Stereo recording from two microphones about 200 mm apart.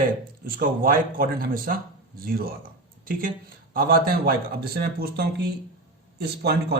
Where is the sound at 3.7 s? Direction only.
50° right (ahead or behind).